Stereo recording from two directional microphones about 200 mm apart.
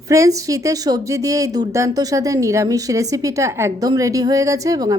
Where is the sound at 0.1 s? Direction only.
15° right (ahead or behind).